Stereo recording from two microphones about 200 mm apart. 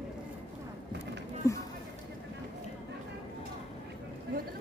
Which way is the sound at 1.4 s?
15° left (ahead or behind).